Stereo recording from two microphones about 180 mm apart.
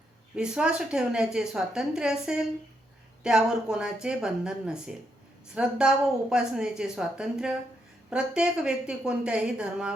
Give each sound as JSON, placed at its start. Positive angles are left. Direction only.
{"t": 0.3, "sound": "a woman's voice", "side_deg": -5}